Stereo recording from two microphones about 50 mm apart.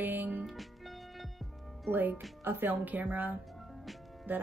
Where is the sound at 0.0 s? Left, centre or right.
Right.